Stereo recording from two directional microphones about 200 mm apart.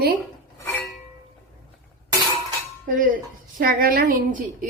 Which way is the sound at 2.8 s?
40° right (ahead or behind).